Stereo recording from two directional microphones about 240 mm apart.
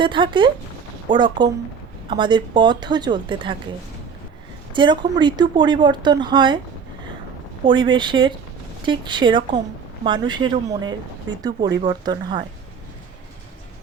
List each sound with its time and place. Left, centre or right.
0.0 s speech: centre
4.7 s speech: centre
7.6 s speech: centre